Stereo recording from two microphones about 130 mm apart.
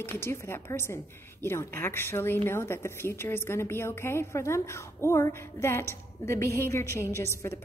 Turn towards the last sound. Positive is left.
turn(degrees=20)  # may be behind; listen again after turning